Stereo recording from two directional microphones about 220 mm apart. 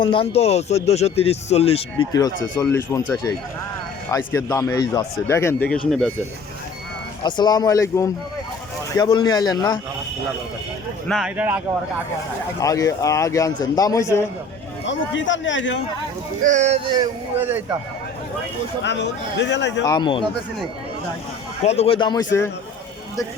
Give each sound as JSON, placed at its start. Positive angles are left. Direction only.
{"t": 0.0, "sound": "speech", "side_deg": 25}
{"t": 2.6, "sound": "a man's voice", "side_deg": 15}
{"t": 4.1, "sound": "a man's voice", "side_deg": 10}
{"t": 7.2, "sound": "a man's voice", "side_deg": 20}
{"t": 11.1, "sound": "speech", "side_deg": -5}
{"t": 12.5, "sound": "a man's voice", "side_deg": 15}
{"t": 14.8, "sound": "speech", "side_deg": 55}
{"t": 16.4, "sound": "speech", "side_deg": -35}
{"t": 17.4, "sound": "speech", "side_deg": -10}
{"t": 18.8, "sound": "speech", "side_deg": 50}
{"t": 19.8, "sound": "speech", "side_deg": 20}
{"t": 21.6, "sound": "speech", "side_deg": 30}